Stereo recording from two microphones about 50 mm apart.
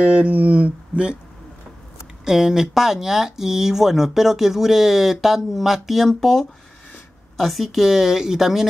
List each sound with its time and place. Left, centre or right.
0.0 s speech: right
2.2 s a woman's voice: centre